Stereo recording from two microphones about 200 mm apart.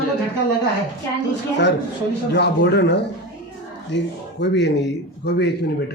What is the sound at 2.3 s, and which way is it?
A man's voice, 60° left (ahead or behind).